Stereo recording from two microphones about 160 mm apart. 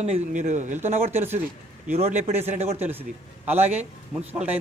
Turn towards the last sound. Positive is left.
turn(degrees=-40)  # may be behind; listen again after turning